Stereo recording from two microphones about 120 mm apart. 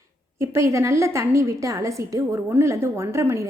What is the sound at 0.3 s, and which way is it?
A woman's voice, 25° right (ahead or behind).